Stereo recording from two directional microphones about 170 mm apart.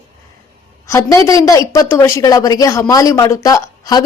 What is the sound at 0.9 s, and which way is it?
A woman's voice, 15° left (ahead or behind).